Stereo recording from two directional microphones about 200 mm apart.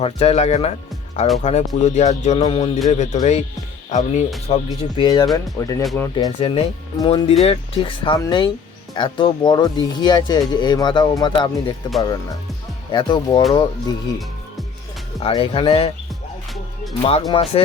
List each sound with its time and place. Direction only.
0.0 s speech: 30° left (ahead or behind)
12.9 s speech: 20° left (ahead or behind)
15.2 s speech: 25° left (ahead or behind)
17.0 s speech: 30° left (ahead or behind)